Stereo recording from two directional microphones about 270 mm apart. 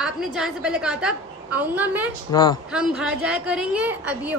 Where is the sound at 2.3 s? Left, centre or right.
Centre.